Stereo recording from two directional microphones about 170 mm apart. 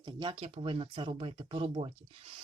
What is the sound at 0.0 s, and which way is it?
Speech, 30° right (ahead or behind).